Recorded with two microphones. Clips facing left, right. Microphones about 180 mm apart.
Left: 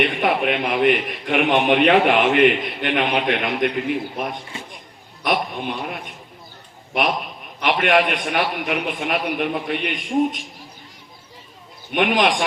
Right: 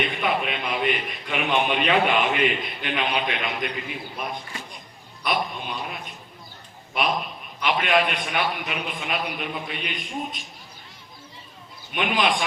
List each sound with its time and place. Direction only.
0.0 s a man's voice: 70° left (ahead or behind)
4.5 s chop: 25° left (ahead or behind)
5.2 s a man's voice: 65° left (ahead or behind)
7.6 s a man's voice: 70° left (ahead or behind)
11.9 s a man's voice: 65° left (ahead or behind)